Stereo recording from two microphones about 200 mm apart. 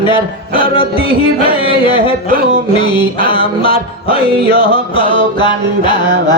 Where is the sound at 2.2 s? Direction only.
45° right (ahead or behind).